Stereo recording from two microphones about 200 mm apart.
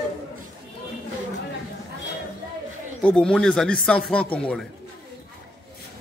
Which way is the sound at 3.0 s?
5° left (ahead or behind).